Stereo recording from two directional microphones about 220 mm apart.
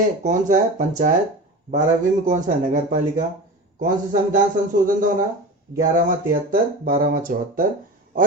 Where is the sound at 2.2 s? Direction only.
35° right (ahead or behind).